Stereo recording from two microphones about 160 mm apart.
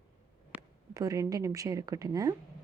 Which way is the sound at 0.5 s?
20° right (ahead or behind).